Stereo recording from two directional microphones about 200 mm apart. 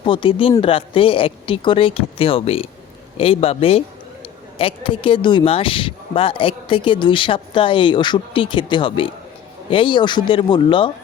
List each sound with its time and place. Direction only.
0.0 s speech: 25° left (ahead or behind)